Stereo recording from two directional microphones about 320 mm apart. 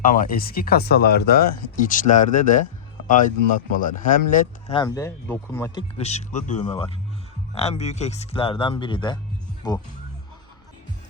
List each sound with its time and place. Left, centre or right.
0.0 s speech: left
4.8 s speech: centre